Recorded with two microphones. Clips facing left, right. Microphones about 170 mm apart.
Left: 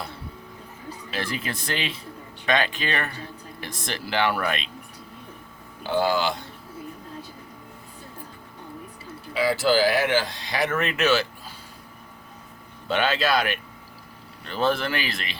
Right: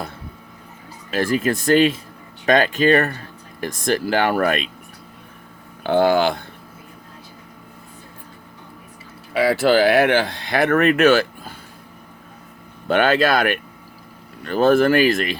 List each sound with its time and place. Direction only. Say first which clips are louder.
1.1 s speech: right 11 dB; 45° right (ahead or behind)
5.8 s speech: right 7 dB; 60° right (ahead or behind)
9.3 s speech: right 5 dB; 60° right (ahead or behind)
12.9 s speech: right 6 dB; 55° right (ahead or behind)